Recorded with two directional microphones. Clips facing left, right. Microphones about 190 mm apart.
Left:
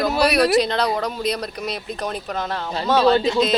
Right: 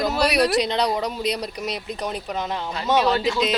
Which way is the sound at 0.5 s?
15° right (ahead or behind).